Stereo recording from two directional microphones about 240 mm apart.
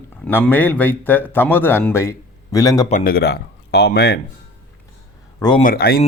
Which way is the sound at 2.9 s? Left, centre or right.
Left.